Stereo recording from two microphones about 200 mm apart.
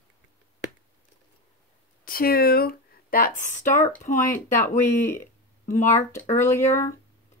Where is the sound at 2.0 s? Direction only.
50° left (ahead or behind).